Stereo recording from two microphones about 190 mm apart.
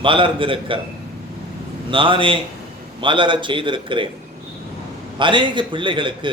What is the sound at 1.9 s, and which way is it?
A man's voice, 25° right (ahead or behind).